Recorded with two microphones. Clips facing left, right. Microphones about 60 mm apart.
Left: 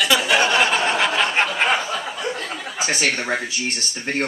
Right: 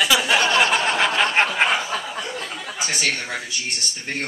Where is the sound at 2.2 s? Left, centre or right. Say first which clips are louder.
Left 3 dB; left.